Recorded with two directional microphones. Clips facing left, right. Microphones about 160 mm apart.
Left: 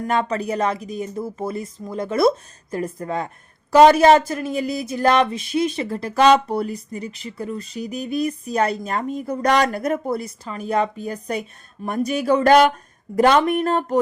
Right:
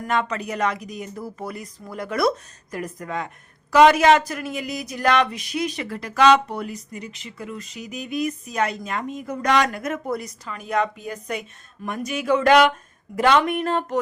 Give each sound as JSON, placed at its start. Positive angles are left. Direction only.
{"t": 0.1, "sound": "speech", "side_deg": 35}